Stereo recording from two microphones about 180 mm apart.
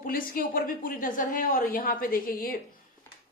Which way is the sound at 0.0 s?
50° left (ahead or behind).